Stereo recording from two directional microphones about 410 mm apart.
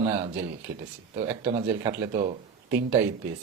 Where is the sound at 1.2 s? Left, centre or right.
Centre.